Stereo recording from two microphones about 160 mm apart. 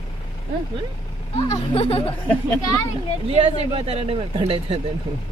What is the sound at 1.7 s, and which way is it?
Speech, 35° left (ahead or behind).